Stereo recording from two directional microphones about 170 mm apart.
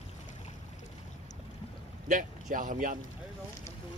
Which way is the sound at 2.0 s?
50° right (ahead or behind).